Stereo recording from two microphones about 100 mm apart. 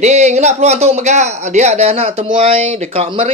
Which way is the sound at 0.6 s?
90° right.